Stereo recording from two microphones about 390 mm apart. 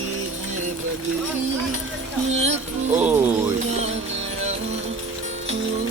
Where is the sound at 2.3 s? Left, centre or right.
Right.